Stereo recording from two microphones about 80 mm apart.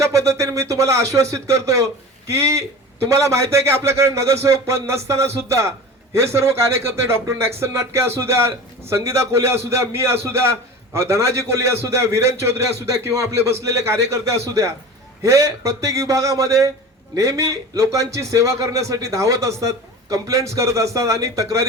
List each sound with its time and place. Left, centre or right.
0.0 s a man's voice: right